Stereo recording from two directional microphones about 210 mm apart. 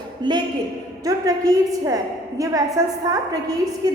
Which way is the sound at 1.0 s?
15° right (ahead or behind).